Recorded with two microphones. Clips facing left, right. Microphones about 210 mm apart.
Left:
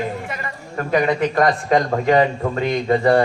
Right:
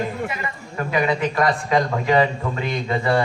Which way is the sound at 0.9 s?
45° left (ahead or behind).